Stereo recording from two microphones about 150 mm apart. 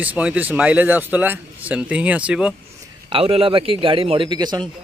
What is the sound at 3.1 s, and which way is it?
A man's voice, 40° right (ahead or behind).